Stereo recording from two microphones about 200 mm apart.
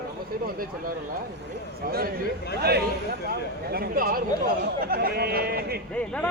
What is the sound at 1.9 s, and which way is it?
Speech, 50° right (ahead or behind).